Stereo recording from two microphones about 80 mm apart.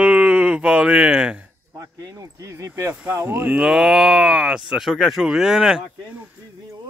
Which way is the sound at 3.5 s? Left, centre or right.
Centre.